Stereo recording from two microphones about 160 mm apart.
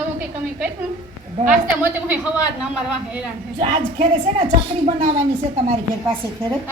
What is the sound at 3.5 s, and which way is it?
A woman's voice, 40° right (ahead or behind).